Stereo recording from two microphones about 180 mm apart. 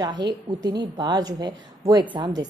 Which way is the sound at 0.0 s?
25° right (ahead or behind).